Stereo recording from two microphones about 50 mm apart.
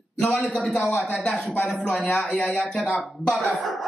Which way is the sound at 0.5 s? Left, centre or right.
Centre.